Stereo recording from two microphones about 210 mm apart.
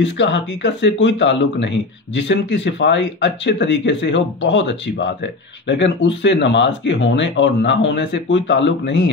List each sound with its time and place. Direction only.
0.0 s speech: 60° left (ahead or behind)